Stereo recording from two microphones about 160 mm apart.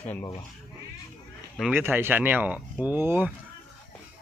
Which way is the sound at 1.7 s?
15° right (ahead or behind).